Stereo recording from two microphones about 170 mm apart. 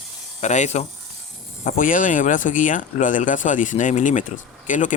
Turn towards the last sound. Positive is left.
turn(degrees=50)  # may be behind; listen again after turning